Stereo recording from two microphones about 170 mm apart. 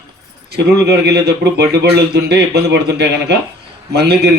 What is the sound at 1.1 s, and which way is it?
Speech, 75° right (ahead or behind).